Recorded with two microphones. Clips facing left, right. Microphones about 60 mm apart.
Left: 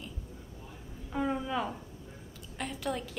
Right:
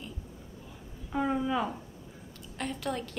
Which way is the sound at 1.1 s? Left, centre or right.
Centre.